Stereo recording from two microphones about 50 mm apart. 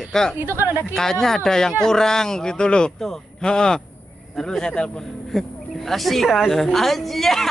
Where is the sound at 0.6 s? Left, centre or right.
Right.